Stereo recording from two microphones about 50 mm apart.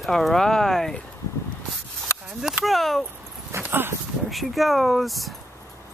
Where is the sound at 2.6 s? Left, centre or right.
Centre.